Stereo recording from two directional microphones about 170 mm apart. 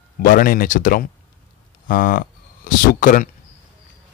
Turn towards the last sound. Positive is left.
turn(degrees=50)  # may be behind; listen again after turning